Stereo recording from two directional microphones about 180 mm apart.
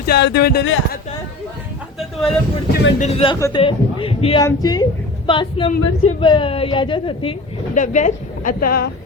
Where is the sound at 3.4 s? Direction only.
15° left (ahead or behind).